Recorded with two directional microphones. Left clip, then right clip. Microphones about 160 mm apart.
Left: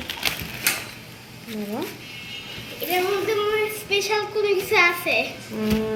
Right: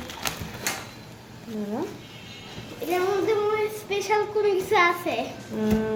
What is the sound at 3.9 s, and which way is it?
Speech, 90° right.